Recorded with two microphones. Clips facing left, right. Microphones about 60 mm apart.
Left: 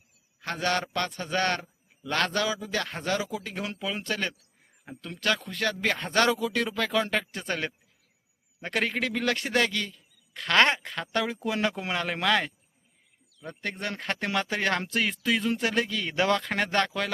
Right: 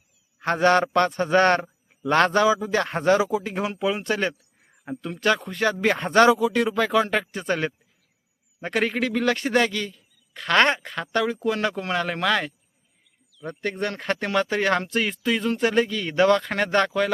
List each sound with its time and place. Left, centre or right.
0.3 s a man's voice: right
6.1 s a man's voice: centre